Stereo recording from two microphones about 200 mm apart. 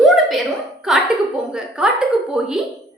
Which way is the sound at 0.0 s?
Centre (ahead or behind).